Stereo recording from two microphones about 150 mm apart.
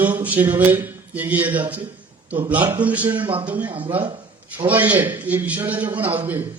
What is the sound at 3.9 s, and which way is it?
Speech, 30° right (ahead or behind).